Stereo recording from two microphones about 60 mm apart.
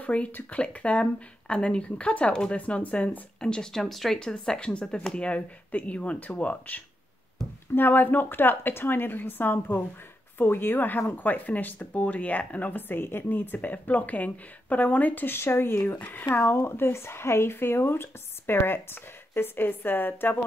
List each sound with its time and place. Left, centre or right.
0.0 s speech: left
3.3 s speech: centre
3.8 s speech: centre
4.2 s a woman's voice: centre; by 15.3 s left
15.3 s speech: left
16.0 s speech: left
16.3 s a woman's voice: left